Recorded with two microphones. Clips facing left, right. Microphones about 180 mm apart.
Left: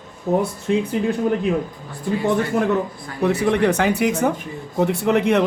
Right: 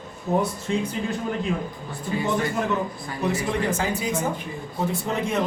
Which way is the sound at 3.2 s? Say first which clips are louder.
Left 7 dB; 60° left (ahead or behind).